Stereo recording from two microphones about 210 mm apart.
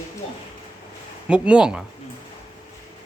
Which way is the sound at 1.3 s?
5° right (ahead or behind).